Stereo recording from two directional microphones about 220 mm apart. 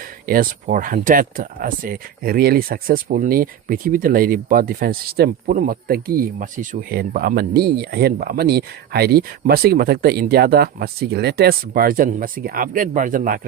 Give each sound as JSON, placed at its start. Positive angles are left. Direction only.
{"t": 0.3, "sound": "speech", "side_deg": -40}